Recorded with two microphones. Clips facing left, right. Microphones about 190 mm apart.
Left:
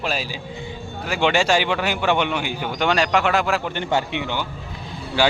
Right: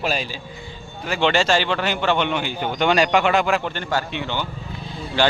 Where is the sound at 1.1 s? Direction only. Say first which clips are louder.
Even; 10° left (ahead or behind).